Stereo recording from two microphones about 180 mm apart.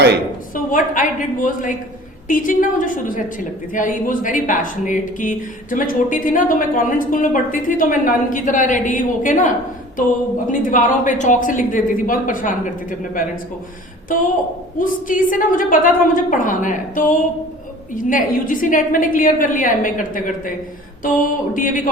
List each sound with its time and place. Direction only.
0.5 s speech: 50° left (ahead or behind)
10.7 s speech: 45° left (ahead or behind)
21.5 s speech: 50° left (ahead or behind)